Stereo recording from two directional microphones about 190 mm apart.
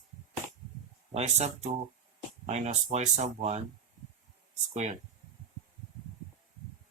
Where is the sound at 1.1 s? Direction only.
35° right (ahead or behind).